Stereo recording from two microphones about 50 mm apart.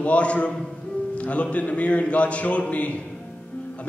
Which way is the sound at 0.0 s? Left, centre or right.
Left.